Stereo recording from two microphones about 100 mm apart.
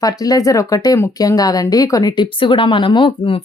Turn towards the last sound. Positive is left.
turn(degrees=55)  # may be behind; listen again after turning